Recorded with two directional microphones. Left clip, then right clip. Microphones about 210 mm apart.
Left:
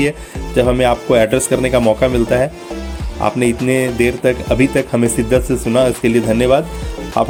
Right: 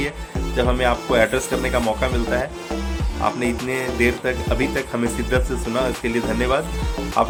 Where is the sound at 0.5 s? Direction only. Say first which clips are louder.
Left 7 dB; 35° left (ahead or behind).